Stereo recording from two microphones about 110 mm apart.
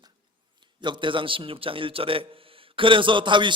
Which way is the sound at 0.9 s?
50° right (ahead or behind).